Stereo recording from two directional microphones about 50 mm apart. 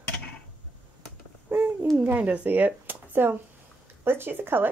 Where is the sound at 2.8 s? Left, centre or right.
Right.